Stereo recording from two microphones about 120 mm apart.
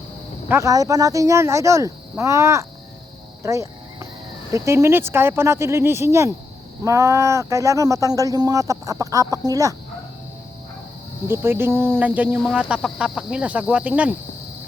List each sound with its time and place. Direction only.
0.4 s a man's voice: 20° right (ahead or behind)
0.7 s speech: 30° right (ahead or behind)
3.4 s cricket: 25° right (ahead or behind)
4.5 s speech: 25° right (ahead or behind)
11.3 s speech: 20° right (ahead or behind)